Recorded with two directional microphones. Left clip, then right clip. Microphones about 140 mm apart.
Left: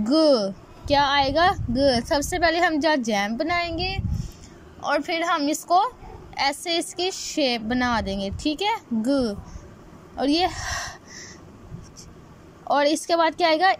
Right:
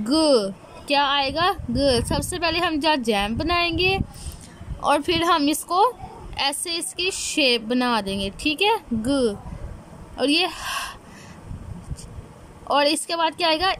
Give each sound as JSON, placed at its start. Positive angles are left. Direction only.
{"t": 0.0, "sound": "a woman's voice", "side_deg": -10}
{"t": 12.6, "sound": "a woman's voice", "side_deg": -10}